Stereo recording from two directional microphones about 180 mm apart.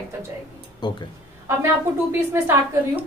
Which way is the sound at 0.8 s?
25° left (ahead or behind).